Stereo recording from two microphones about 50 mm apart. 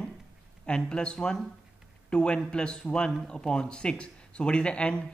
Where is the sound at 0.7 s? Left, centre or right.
Centre.